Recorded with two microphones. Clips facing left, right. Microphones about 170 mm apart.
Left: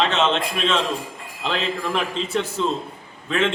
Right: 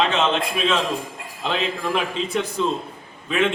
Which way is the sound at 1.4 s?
5° right (ahead or behind).